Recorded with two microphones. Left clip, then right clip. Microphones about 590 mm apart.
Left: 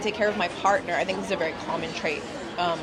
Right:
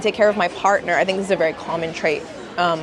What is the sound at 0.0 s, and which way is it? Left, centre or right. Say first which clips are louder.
Speech: right 8 dB; right.